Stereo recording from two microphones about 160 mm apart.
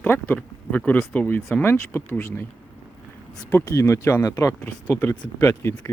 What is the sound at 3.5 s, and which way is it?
Speech, 20° left (ahead or behind).